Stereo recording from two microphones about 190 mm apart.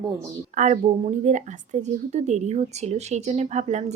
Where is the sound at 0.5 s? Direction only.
40° right (ahead or behind).